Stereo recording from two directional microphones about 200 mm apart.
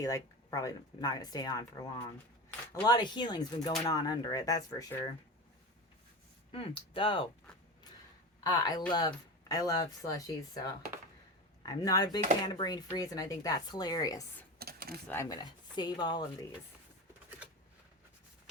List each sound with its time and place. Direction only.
0.0 s speech: 15° left (ahead or behind)
6.5 s speech: 25° left (ahead or behind)
8.4 s speech: 20° left (ahead or behind)
11.6 s speech: 20° left (ahead or behind)
14.6 s a sound: 50° right (ahead or behind)
15.0 s speech: 10° left (ahead or behind)